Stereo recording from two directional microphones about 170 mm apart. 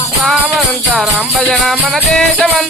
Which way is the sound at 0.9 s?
Centre (ahead or behind).